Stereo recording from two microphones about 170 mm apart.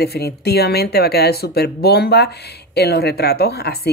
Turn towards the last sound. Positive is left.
turn(degrees=70)  # may be behind; listen again after turning